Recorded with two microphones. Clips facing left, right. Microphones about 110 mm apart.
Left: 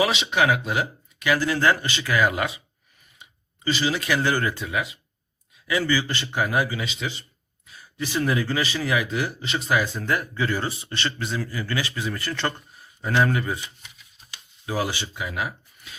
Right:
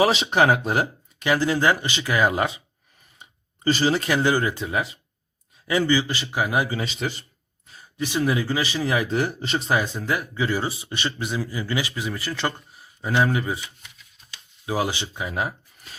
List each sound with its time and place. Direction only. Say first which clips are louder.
0.0 s speech: right 3 dB; 40° right (ahead or behind)
3.2 s a sound: right 2 dB; 40° right (ahead or behind)
4.2 s a man's voice: right 2 dB; 15° right (ahead or behind)
4.6 s speech: right 2 dB; 35° right (ahead or behind)
5.9 s a man's voice: right 2 dB; 15° right (ahead or behind)
6.7 s speech: right 3 dB; 35° right (ahead or behind)
7.7 s a sound: right 1 dB; 25° right (ahead or behind)
8.2 s a man's voice: right 1 dB; 15° right (ahead or behind)
8.9 s speech: right 2 dB; 35° right (ahead or behind)
10.0 s a man's voice: even; 10° right (ahead or behind)
14.7 s speech: right 2 dB; 20° right (ahead or behind)